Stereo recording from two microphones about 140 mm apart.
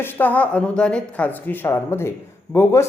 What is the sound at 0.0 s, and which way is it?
Speech, 15° left (ahead or behind).